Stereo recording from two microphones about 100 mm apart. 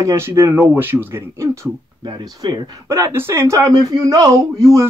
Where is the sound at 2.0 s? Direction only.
45° right (ahead or behind).